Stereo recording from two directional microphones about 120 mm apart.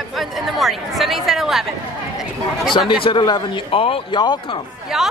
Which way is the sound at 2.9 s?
45° left (ahead or behind).